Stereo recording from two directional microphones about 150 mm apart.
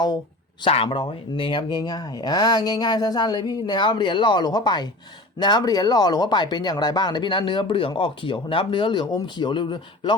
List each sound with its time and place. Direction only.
0.6 s speech: 35° left (ahead or behind)